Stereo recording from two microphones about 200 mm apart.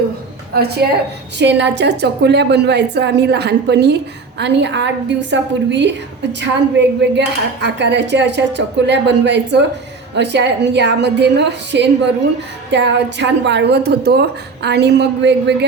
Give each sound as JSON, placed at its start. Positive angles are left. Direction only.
{"t": 0.5, "sound": "a woman's voice", "side_deg": -50}